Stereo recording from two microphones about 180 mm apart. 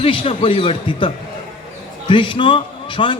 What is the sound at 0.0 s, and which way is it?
A man's voice, 30° left (ahead or behind).